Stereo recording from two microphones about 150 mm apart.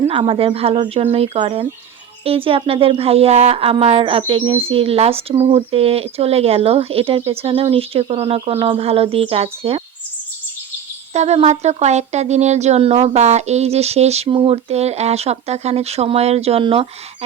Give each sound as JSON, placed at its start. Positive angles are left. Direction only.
{"t": 0.1, "sound": "speech", "side_deg": -35}
{"t": 11.1, "sound": "speech", "side_deg": -45}